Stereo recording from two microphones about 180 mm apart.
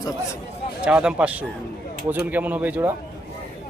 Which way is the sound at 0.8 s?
5° right (ahead or behind).